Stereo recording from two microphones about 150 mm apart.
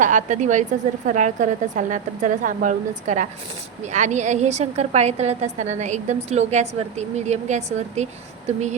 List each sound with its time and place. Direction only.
0.0 s a woman's voice: 55° right (ahead or behind)